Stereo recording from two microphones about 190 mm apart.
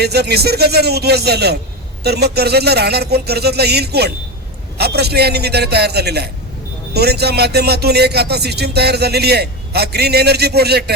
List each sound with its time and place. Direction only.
0.0 s a man's voice: 60° right (ahead or behind)